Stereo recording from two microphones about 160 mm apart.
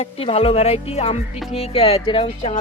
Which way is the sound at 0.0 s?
40° left (ahead or behind).